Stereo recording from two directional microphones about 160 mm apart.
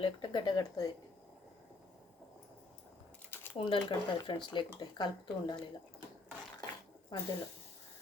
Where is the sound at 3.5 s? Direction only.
30° left (ahead or behind).